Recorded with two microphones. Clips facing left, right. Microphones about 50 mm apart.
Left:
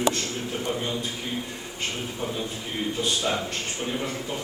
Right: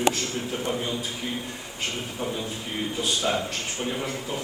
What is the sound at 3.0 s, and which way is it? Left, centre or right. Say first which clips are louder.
Speech: right 1 dB; centre.